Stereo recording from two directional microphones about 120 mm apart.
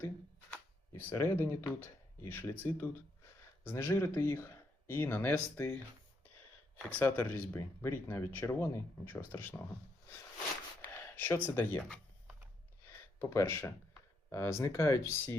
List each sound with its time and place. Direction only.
0.5 s speech: 20° left (ahead or behind)
7.0 s speech: 20° left (ahead or behind)
10.8 s speech: 20° left (ahead or behind)
12.8 s a sound: 20° left (ahead or behind)
14.3 s speech: 25° left (ahead or behind)